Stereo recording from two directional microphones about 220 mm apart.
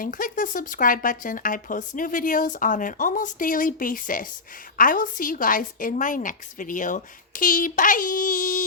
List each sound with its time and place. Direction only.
0.0 s speech: 40° left (ahead or behind)